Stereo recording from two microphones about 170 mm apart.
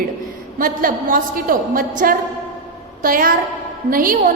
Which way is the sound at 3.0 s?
55° right (ahead or behind).